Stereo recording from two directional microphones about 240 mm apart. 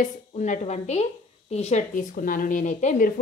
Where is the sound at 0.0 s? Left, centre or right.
Left.